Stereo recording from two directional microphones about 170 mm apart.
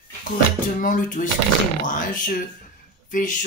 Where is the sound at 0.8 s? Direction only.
50° left (ahead or behind).